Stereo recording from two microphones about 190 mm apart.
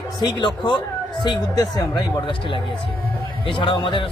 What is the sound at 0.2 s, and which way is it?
A man's voice, 25° left (ahead or behind).